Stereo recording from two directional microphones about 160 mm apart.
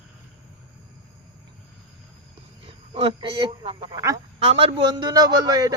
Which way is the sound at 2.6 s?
35° right (ahead or behind).